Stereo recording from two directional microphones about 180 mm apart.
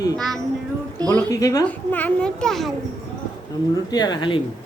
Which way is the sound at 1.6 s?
10° left (ahead or behind).